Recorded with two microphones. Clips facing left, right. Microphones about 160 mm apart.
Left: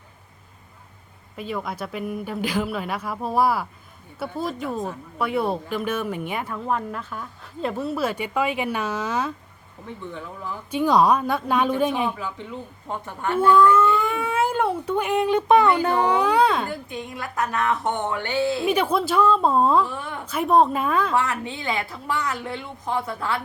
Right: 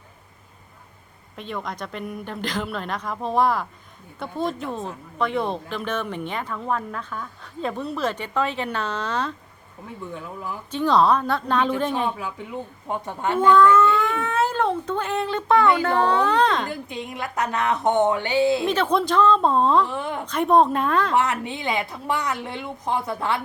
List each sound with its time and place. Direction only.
1.4 s a woman's voice: 5° left (ahead or behind)
10.1 s speech: 10° right (ahead or behind)
10.7 s a woman's voice: 10° left (ahead or behind)
12.9 s a woman's voice: 20° right (ahead or behind)
13.4 s speech: 10° left (ahead or behind)
16.6 s a woman's voice: 20° right (ahead or behind)
18.6 s a woman's voice: 10° left (ahead or behind)
21.2 s a woman's voice: 20° right (ahead or behind)